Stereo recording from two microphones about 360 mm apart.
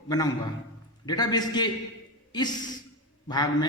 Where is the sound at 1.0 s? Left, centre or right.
Centre.